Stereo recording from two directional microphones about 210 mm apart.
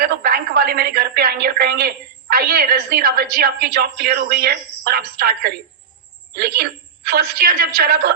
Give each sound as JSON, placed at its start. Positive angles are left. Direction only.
{"t": 0.0, "sound": "a woman's voice", "side_deg": -45}